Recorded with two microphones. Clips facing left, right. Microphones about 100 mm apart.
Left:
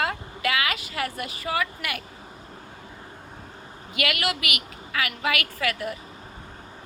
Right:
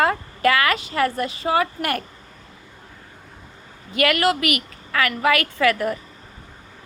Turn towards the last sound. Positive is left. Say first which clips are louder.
# right 9 dB
turn(degrees=-40)  # may be behind; listen again after turning